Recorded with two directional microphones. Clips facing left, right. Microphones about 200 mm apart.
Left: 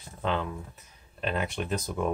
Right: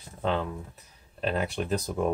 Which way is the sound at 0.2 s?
35° right (ahead or behind).